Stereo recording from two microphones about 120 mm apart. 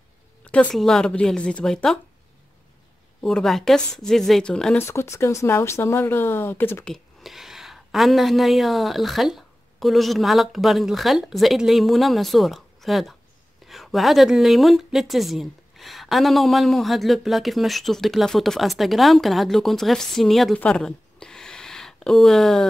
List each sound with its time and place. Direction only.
0.5 s a woman's voice: 10° left (ahead or behind)
3.2 s a woman's voice: 5° left (ahead or behind)
4.7 s speech: 20° left (ahead or behind)
6.9 s a woman's voice: centre (ahead or behind)